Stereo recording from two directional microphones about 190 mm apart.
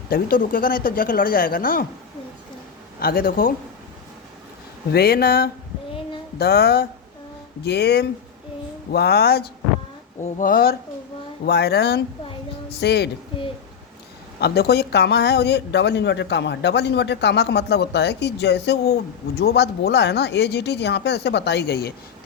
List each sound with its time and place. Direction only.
0.1 s speech: 50° left (ahead or behind)
3.0 s speech: 50° left (ahead or behind)
4.9 s a man's voice: 55° left (ahead or behind)
10.2 s a man's voice: 45° left (ahead or behind); by 13.1 s 60° left (ahead or behind)
14.3 s a man's voice: 55° left (ahead or behind)